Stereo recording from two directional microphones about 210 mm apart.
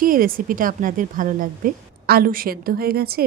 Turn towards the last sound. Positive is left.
turn(degrees=-45)  # may be behind; listen again after turning